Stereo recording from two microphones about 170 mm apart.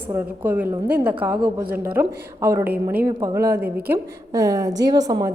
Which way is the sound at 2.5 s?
10° right (ahead or behind).